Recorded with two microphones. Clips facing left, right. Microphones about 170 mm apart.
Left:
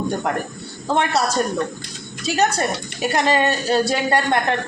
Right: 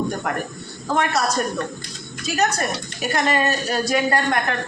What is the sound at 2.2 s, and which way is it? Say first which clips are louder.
A woman's voice: left 2 dB; 30° left (ahead or behind).